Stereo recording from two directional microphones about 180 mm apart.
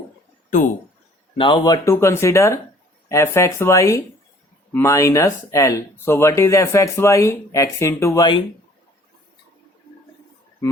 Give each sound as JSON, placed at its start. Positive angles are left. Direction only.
{"t": 1.4, "sound": "speech", "side_deg": 25}